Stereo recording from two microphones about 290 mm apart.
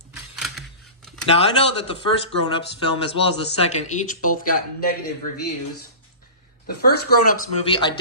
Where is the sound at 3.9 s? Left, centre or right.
Left.